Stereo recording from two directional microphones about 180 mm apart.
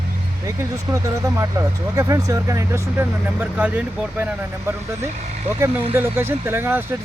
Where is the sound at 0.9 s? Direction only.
15° right (ahead or behind).